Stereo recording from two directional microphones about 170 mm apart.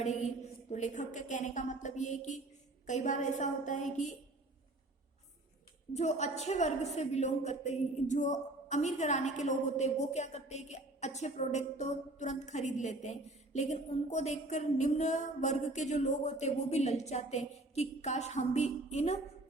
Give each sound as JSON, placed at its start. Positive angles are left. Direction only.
{"t": 0.0, "sound": "a woman's voice", "side_deg": 40}
{"t": 5.9, "sound": "a woman's voice", "side_deg": 40}